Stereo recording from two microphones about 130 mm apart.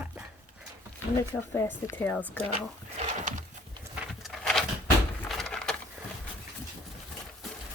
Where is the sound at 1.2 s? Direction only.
20° left (ahead or behind).